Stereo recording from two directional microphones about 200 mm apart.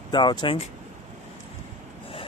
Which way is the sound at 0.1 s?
25° left (ahead or behind).